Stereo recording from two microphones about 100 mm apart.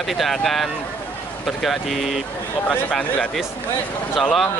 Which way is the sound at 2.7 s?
15° left (ahead or behind).